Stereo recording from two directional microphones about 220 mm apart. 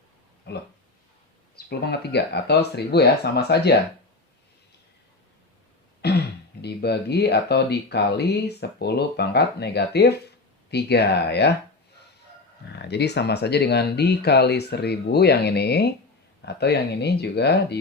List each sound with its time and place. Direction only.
1.5 s speech: 45° left (ahead or behind)
6.0 s speech: 45° left (ahead or behind)
12.8 s speech: 50° left (ahead or behind)